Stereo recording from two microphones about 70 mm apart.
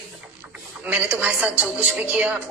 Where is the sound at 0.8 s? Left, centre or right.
Centre.